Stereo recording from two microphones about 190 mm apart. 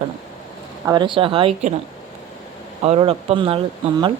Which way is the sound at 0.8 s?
25° right (ahead or behind).